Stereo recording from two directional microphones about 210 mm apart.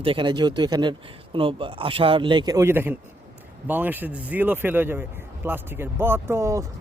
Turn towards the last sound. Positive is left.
turn(degrees=-15)  # may be behind; listen again after turning